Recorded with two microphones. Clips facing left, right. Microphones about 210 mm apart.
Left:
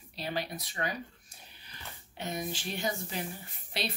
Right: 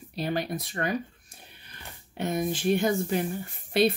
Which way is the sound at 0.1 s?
50° right (ahead or behind).